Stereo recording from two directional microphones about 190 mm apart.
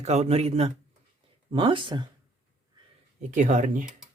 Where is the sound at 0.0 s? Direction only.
35° right (ahead or behind).